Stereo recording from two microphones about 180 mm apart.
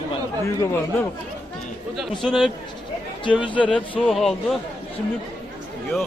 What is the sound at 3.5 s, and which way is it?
Speech, 5° left (ahead or behind).